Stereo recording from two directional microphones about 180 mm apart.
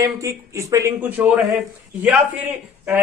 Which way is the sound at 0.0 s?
15° right (ahead or behind).